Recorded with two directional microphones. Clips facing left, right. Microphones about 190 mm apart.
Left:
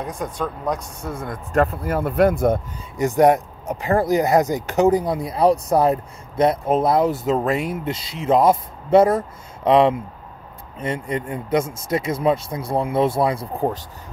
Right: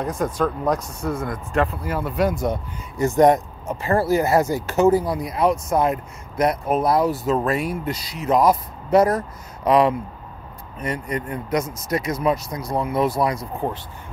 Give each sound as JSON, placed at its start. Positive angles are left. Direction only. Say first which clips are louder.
{"t": 1.0, "sound": "speech", "louder": "right 4 dB", "side_deg": 25}
{"t": 1.5, "sound": "speech", "louder": "left 4 dB", "side_deg": 45}
{"t": 3.0, "sound": "speech", "louder": "even", "side_deg": 10}